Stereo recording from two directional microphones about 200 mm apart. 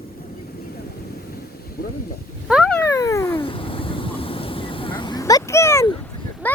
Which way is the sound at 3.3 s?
25° left (ahead or behind).